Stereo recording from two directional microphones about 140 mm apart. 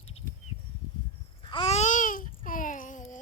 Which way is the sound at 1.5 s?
40° left (ahead or behind).